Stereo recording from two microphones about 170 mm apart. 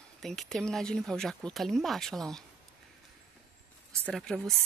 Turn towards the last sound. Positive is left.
turn(degrees=0)  # may be behind; listen again after turning